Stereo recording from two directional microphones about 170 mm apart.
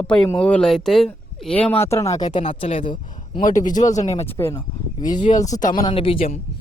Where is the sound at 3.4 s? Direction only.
50° left (ahead or behind).